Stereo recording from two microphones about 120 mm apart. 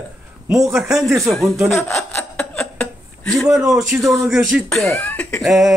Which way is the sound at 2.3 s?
10° left (ahead or behind).